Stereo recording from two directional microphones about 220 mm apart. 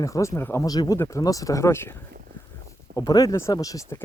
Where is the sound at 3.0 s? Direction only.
15° left (ahead or behind).